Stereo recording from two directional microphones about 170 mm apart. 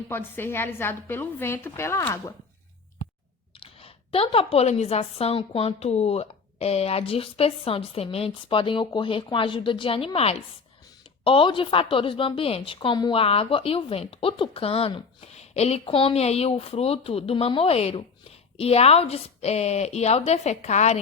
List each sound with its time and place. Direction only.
0.1 s a woman's voice: 10° left (ahead or behind)
3.6 s a woman's voice: 35° left (ahead or behind)